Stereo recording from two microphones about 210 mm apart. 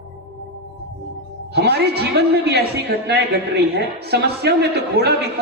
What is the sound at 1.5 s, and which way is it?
A man's voice, 50° right (ahead or behind).